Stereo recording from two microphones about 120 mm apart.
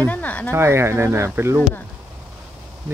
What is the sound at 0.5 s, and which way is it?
Speech, 20° right (ahead or behind).